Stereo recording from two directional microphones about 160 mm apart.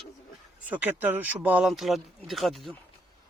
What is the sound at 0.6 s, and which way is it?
Speech, 10° right (ahead or behind).